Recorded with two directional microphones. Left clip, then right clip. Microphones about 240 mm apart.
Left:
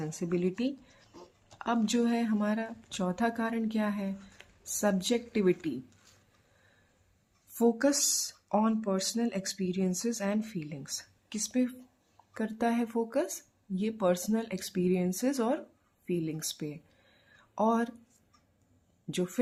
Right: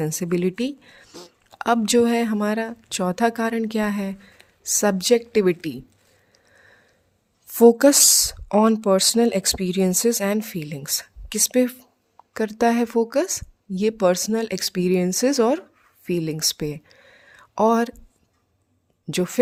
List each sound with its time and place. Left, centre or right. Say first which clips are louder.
0.0 s speech: right 9 dB; right
7.6 s speech: right 14 dB; right
19.1 s speech: right 10 dB; right